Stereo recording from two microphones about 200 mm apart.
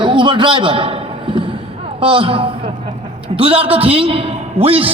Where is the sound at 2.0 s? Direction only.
25° right (ahead or behind).